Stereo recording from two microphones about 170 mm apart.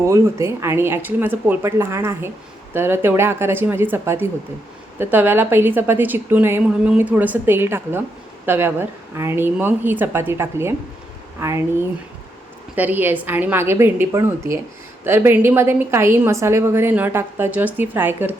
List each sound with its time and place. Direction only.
0.0 s a woman's voice: 15° right (ahead or behind)
12.7 s a woman's voice: 10° right (ahead or behind)